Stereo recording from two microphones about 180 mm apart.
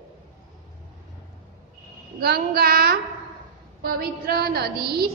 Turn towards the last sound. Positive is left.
turn(degrees=-60)  # may be behind; listen again after turning